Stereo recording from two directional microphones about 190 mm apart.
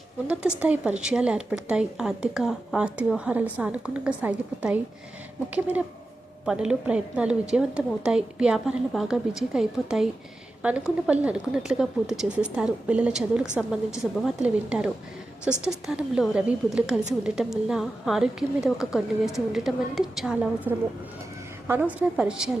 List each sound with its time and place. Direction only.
0.6 s a woman's voice: 5° right (ahead or behind)